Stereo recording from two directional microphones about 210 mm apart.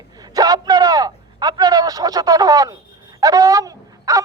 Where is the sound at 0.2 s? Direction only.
20° right (ahead or behind).